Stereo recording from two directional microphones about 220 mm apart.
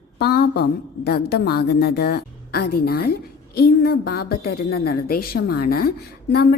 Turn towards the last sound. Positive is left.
turn(degrees=45)  # may be behind; listen again after turning